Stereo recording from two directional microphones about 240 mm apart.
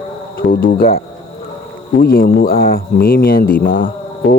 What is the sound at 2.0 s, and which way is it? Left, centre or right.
Speech, left.